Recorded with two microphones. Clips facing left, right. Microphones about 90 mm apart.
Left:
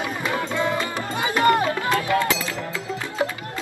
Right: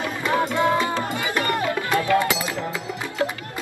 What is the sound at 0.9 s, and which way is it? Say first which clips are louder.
Music: even; 20° left (ahead or behind).